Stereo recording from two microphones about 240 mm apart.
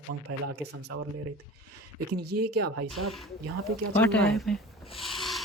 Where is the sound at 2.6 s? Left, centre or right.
Right.